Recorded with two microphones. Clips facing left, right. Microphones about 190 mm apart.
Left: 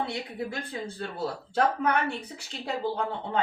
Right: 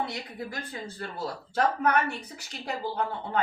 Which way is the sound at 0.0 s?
25° left (ahead or behind).